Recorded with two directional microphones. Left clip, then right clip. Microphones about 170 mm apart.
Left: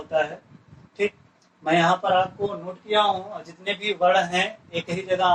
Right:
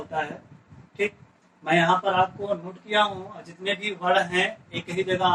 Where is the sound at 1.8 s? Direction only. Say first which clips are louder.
Left 1 dB; 15° right (ahead or behind).